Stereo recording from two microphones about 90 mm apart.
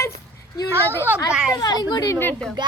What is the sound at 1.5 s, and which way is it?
Speech, 45° left (ahead or behind).